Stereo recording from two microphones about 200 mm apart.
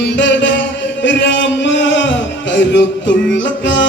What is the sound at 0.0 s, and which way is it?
Music, 65° left (ahead or behind).